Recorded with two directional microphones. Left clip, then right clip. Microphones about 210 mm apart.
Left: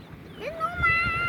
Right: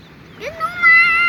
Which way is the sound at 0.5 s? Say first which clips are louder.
Right 10 dB; 20° left (ahead or behind).